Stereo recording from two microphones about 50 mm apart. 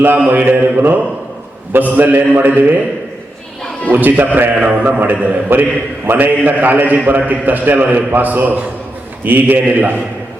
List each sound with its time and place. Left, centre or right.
0.0 s a man's voice: right
3.9 s a man's voice: right